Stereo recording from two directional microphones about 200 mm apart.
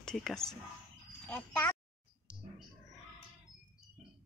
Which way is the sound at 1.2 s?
10° left (ahead or behind).